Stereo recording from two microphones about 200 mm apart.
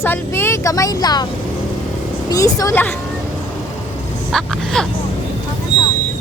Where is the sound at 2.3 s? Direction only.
15° left (ahead or behind).